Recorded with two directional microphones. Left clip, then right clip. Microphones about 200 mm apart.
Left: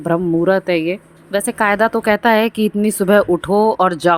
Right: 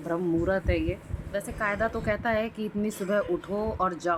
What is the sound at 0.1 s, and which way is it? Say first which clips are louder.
A woman's voice: left 12 dB; 40° left (ahead or behind).